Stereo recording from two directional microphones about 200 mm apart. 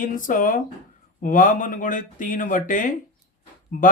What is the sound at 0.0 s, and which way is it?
Speech, 40° left (ahead or behind).